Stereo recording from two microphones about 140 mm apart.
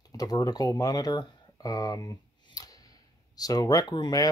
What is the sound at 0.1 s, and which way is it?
Speech, 25° left (ahead or behind).